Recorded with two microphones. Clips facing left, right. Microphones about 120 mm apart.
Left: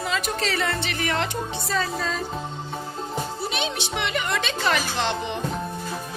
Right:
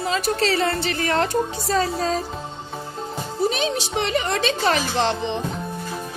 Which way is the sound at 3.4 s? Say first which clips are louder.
Right 6 dB; 40° right (ahead or behind).